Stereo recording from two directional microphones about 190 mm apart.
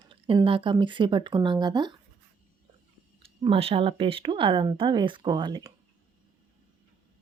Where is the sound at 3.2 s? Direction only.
30° right (ahead or behind).